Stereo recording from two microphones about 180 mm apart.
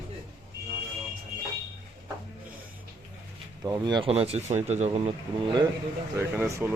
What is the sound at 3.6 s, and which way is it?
Speech, 20° right (ahead or behind).